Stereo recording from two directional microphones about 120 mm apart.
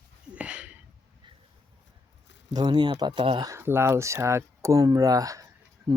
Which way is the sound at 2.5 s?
35° right (ahead or behind).